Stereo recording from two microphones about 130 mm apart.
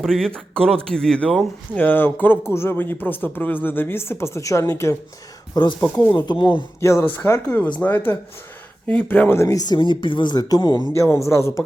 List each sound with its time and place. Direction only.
0.0 s speech: 5° left (ahead or behind)
1.7 s speech: 15° left (ahead or behind)
6.1 s speech: 35° left (ahead or behind)
6.7 s speech: 20° left (ahead or behind)
10.9 s a man's voice: 20° left (ahead or behind)